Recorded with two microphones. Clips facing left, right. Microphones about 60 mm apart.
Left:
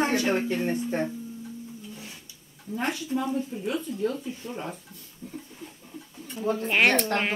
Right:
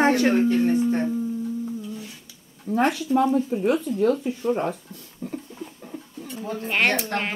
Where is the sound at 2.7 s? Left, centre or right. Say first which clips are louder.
Right 8 dB; right.